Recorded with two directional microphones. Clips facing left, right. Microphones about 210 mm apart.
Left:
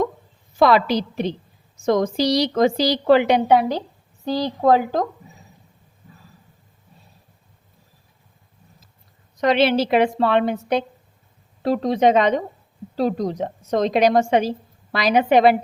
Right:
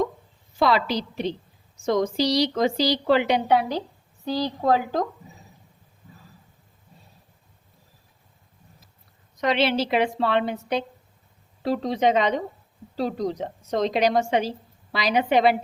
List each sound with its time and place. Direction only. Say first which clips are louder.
0.6 s a woman's voice: left 5 dB; 50° left (ahead or behind)
9.4 s a woman's voice: left 5 dB; 45° left (ahead or behind)